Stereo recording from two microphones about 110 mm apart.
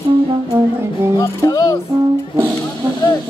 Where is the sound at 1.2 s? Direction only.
35° left (ahead or behind).